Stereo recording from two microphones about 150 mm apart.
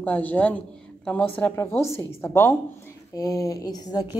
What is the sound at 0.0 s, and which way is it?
A woman's voice, 10° left (ahead or behind).